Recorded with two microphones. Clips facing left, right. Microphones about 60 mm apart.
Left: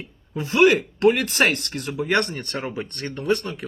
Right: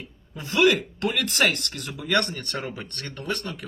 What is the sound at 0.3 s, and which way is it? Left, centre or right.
Speech, left.